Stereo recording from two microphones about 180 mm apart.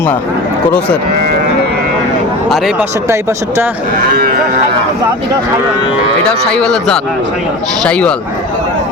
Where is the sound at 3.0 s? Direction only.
15° right (ahead or behind).